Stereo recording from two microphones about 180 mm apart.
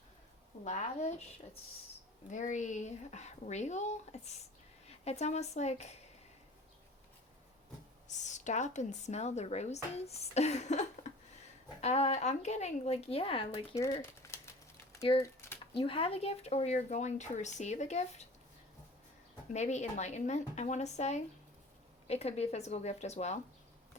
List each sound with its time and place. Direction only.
0.6 s a woman's voice: 40° left (ahead or behind)
2.3 s a woman's voice: 45° left (ahead or behind)
8.0 s a woman's voice: 40° left (ahead or behind)
14.0 s a sound: 15° left (ahead or behind)
15.2 s typing: 15° left (ahead or behind)
15.7 s a woman's voice: 30° left (ahead or behind)
19.5 s a woman's voice: 40° left (ahead or behind)